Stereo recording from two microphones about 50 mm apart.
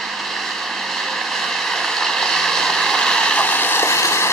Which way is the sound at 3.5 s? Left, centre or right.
Left.